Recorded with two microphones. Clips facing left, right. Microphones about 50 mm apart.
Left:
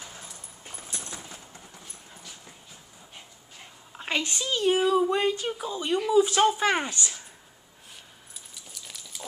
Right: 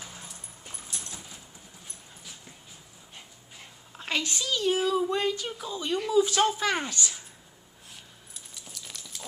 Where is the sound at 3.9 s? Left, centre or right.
Centre.